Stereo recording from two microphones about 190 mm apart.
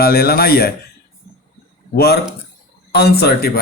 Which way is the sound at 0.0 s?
55° left (ahead or behind).